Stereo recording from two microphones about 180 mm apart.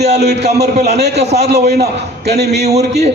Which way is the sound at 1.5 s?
65° right (ahead or behind).